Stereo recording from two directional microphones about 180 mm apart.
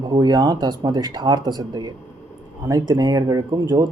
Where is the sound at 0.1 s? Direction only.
20° right (ahead or behind).